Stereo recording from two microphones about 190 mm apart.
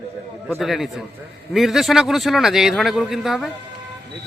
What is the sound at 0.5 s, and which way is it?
Speech, centre (ahead or behind).